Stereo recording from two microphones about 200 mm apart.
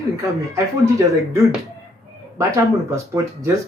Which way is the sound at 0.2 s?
15° right (ahead or behind).